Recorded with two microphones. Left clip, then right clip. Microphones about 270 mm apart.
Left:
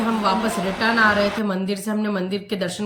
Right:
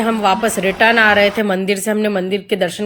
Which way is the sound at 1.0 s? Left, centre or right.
Centre.